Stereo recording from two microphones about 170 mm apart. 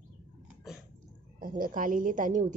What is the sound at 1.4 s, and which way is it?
A woman's voice, 55° right (ahead or behind).